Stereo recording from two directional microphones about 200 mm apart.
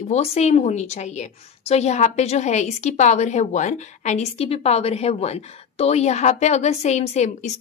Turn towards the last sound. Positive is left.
turn(degrees=35)  # may be behind; listen again after turning